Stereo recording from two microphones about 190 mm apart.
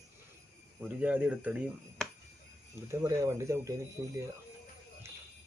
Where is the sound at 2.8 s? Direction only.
15° right (ahead or behind).